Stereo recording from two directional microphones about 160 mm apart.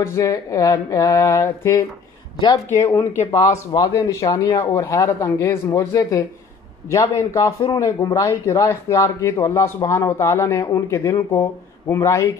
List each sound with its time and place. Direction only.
0.0 s speech: 20° left (ahead or behind)